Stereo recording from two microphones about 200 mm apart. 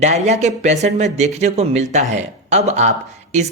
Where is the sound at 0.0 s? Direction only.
35° right (ahead or behind).